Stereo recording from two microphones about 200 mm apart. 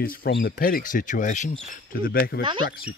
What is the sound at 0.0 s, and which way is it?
Speech, 45° left (ahead or behind).